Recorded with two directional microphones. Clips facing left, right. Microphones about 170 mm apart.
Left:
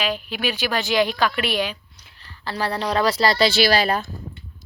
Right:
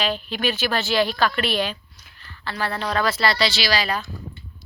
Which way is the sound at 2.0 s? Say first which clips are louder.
Left 2 dB; 30° left (ahead or behind).